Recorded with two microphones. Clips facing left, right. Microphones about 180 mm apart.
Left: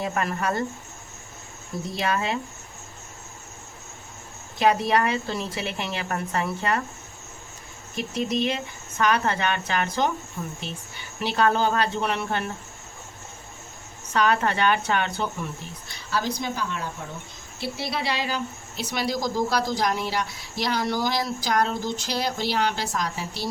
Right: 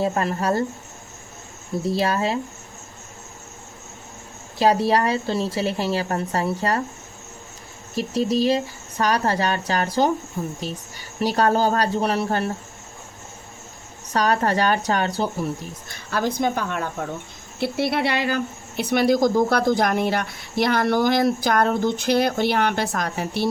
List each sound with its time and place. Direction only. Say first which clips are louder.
0.0 s a woman's voice: right 4 dB; 30° right (ahead or behind)
1.8 s a woman's voice: right 5 dB; 30° right (ahead or behind)
4.5 s a woman's voice: right 3 dB; 30° right (ahead or behind)
7.9 s a woman's voice: right 5 dB; 35° right (ahead or behind)
14.1 s a woman's voice: right 2 dB; 40° right (ahead or behind)
15.9 s a woman's voice: right 3 dB; 50° right (ahead or behind)